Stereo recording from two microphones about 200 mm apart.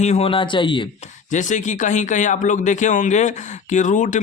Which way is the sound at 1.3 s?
40° left (ahead or behind).